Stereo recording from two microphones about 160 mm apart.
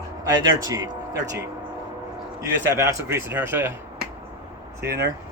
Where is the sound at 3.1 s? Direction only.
15° right (ahead or behind).